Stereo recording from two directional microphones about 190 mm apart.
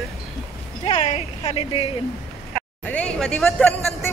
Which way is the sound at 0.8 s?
35° left (ahead or behind).